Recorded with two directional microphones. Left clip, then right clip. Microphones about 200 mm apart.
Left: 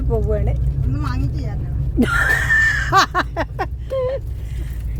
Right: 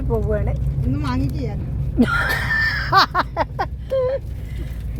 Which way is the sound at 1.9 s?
25° left (ahead or behind).